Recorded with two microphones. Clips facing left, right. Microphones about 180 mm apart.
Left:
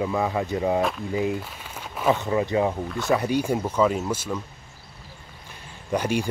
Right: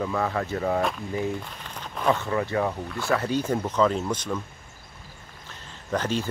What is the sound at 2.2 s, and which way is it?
Speech, 20° left (ahead or behind).